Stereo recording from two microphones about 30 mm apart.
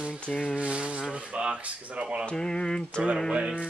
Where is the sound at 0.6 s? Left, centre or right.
Right.